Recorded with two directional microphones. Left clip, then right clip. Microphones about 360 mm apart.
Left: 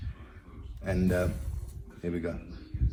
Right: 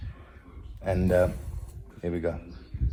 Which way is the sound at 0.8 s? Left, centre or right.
Right.